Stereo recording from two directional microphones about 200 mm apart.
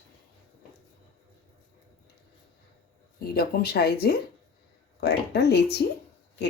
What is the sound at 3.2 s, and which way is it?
Speech, 50° left (ahead or behind).